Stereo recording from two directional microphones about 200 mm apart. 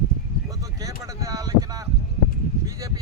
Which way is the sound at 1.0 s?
15° right (ahead or behind).